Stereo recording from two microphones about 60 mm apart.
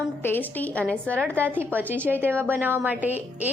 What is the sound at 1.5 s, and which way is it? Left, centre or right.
A woman's voice, right.